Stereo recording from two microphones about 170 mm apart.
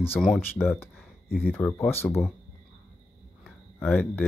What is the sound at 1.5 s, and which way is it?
Speech, 10° left (ahead or behind).